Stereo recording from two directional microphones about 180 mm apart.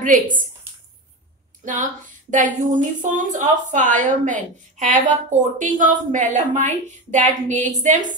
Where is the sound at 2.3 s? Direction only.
45° right (ahead or behind).